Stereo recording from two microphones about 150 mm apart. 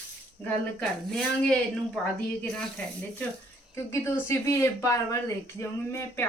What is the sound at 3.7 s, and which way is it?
Speech, 15° left (ahead or behind).